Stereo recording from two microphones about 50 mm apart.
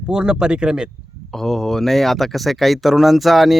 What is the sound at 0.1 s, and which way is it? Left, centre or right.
Speech, centre.